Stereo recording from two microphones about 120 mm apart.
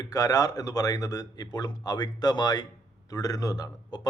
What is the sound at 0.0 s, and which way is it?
Speech, 30° left (ahead or behind).